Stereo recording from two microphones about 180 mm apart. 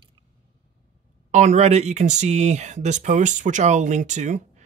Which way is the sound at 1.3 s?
40° right (ahead or behind).